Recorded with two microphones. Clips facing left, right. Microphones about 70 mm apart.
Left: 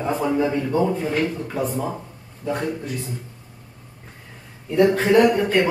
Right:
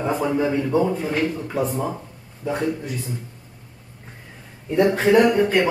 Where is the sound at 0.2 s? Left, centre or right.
Centre.